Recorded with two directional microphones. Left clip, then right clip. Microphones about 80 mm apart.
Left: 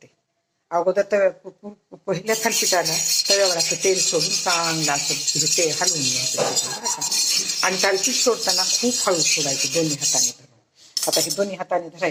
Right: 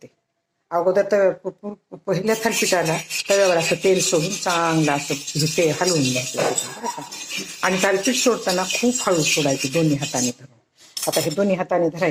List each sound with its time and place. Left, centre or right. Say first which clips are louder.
0.9 s speech: right 2 dB; right